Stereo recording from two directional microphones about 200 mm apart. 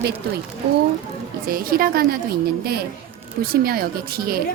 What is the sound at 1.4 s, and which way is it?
Speech, 45° right (ahead or behind).